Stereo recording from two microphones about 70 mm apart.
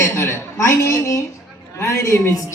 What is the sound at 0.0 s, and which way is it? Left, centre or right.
A woman's voice, left.